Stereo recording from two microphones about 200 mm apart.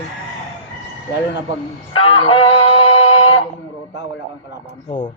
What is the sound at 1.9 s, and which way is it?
Music, 25° left (ahead or behind).